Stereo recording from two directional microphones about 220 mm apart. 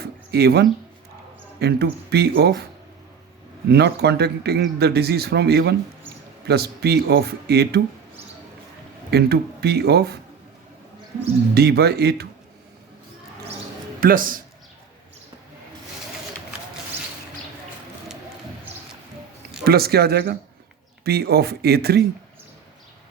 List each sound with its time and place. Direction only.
0.0 s a sound: 45° right (ahead or behind)
1.5 s a man's voice: 50° right (ahead or behind)
3.7 s a man's voice: 50° right (ahead or behind)
9.0 s a man's voice: 45° right (ahead or behind)
11.5 s a man's voice: 45° right (ahead or behind)
14.0 s a man's voice: 40° right (ahead or behind)
19.6 s a man's voice: 45° right (ahead or behind)